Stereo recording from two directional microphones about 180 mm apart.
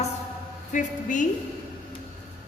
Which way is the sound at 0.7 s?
45° left (ahead or behind).